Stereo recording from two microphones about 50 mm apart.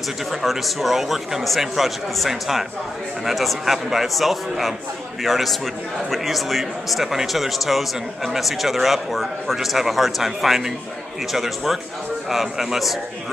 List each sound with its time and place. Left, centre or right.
0.3 s speech: centre